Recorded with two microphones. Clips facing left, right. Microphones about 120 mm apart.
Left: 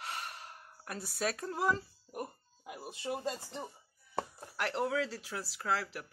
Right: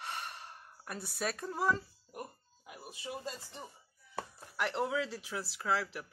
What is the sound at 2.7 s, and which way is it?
Speech, 35° left (ahead or behind).